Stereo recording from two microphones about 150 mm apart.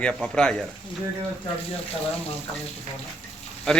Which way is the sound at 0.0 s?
5° left (ahead or behind).